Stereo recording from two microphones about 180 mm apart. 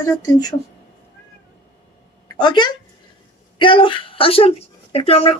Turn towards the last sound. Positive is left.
turn(degrees=30)  # may be behind; listen again after turning